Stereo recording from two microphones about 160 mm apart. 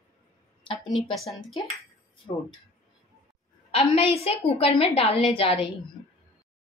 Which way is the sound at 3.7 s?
35° left (ahead or behind).